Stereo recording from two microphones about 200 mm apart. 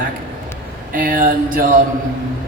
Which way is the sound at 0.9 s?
45° right (ahead or behind).